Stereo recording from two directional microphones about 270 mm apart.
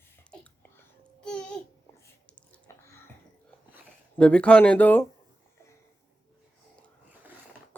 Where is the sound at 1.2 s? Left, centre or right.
Centre.